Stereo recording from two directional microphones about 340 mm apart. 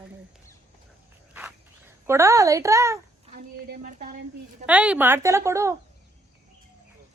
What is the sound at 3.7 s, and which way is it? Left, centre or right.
Speech, right.